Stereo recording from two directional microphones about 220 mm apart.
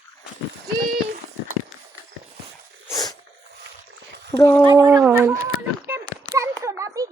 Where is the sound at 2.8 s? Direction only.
15° left (ahead or behind).